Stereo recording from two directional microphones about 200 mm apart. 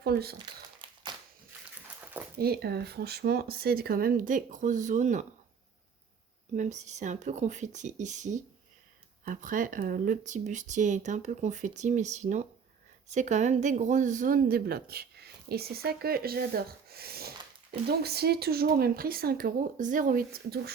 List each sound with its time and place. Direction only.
0.0 s speech: 50° right (ahead or behind)
0.3 s crumpling: 25° right (ahead or behind)
2.4 s speech: 50° right (ahead or behind)
6.5 s speech: 35° right (ahead or behind)